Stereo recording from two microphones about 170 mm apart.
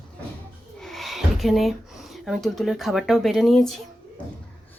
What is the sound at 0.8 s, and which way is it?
Speech, centre (ahead or behind).